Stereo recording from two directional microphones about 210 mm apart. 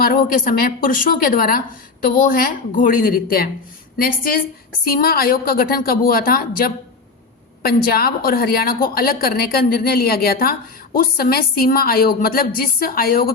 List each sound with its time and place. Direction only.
0.0 s a woman's voice: 40° left (ahead or behind)
7.6 s a woman's voice: 45° left (ahead or behind)